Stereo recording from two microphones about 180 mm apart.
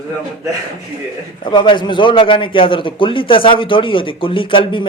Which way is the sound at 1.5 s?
25° left (ahead or behind).